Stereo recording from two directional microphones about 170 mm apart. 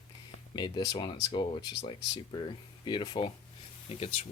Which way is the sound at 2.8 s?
25° left (ahead or behind).